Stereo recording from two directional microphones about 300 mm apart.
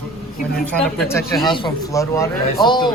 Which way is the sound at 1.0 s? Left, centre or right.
Centre.